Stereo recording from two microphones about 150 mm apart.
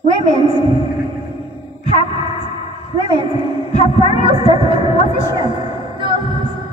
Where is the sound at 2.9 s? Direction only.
30° right (ahead or behind).